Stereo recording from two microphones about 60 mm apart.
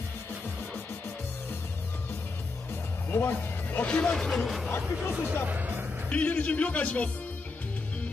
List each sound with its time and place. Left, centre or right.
3.1 s music: left
3.8 s speech: centre
4.3 s speech: centre
5.1 s speech: right
6.0 s a man's voice: left